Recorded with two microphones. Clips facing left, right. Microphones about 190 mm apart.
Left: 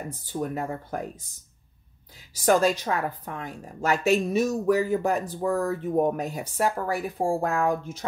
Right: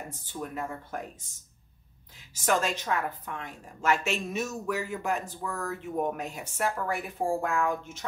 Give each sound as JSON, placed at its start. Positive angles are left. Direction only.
{"t": 0.2, "sound": "a woman's voice", "side_deg": 40}
{"t": 2.3, "sound": "a woman's voice", "side_deg": 35}